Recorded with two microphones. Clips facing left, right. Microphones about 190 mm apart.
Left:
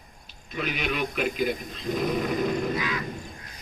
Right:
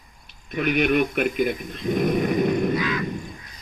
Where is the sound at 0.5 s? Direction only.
55° right (ahead or behind).